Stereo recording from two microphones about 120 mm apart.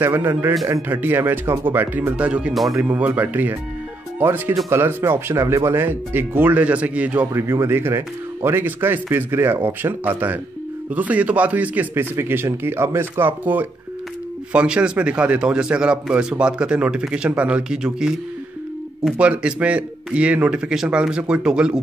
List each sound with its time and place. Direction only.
0.0 s speech: 20° right (ahead or behind); by 2.8 s centre (ahead or behind)
2.8 s speech: 15° right (ahead or behind)